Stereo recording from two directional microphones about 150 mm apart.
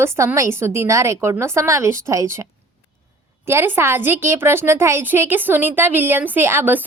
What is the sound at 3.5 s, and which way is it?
Speech, 15° right (ahead or behind).